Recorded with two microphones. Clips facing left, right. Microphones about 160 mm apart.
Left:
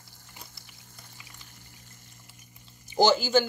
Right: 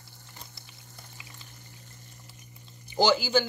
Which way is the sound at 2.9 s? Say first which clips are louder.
Left 2 dB; 45° left (ahead or behind).